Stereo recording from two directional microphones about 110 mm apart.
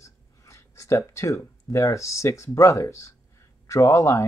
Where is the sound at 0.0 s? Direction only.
30° left (ahead or behind).